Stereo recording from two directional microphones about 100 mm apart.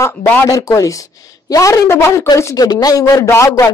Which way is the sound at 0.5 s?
35° left (ahead or behind).